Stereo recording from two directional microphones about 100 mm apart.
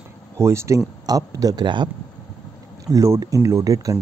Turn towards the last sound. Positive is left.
turn(degrees=-35)  # may be behind; listen again after turning